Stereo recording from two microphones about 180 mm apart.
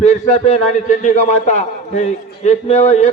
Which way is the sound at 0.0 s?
40° left (ahead or behind).